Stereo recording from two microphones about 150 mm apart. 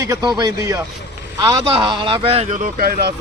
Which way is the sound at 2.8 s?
90° right.